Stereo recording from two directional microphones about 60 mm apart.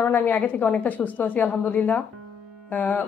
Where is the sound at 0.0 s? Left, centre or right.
Left.